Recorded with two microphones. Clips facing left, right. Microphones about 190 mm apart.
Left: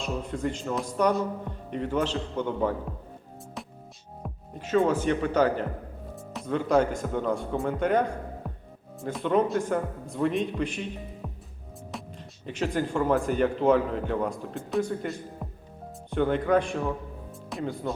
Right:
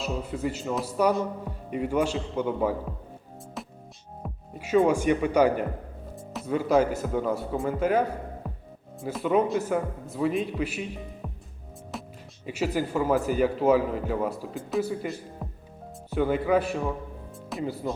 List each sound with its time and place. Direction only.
0.0 s a man's voice: 5° right (ahead or behind)
3.6 s music: centre (ahead or behind)
4.2 s a man's voice: 10° right (ahead or behind)
12.5 s a man's voice: 5° right (ahead or behind)